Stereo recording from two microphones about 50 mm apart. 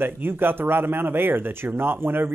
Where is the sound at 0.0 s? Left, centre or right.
Right.